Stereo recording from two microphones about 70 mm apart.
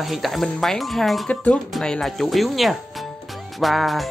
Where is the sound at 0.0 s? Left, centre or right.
Centre.